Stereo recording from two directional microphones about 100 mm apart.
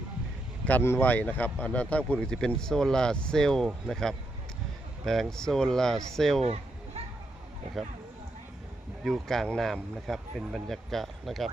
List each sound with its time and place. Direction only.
0.6 s speech: 20° left (ahead or behind); by 6.4 s 5° left (ahead or behind)
6.4 s a sound: 90° right
9.0 s speech: centre (ahead or behind)